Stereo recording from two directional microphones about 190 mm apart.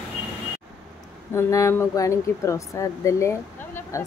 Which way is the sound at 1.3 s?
15° left (ahead or behind).